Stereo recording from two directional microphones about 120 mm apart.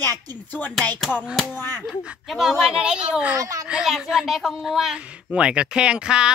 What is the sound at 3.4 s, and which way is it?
Speech, 30° right (ahead or behind).